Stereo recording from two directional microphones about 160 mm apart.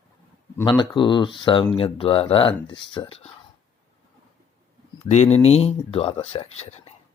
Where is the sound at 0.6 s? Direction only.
30° left (ahead or behind).